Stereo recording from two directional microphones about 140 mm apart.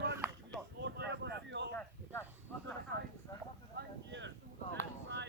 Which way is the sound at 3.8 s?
90° right.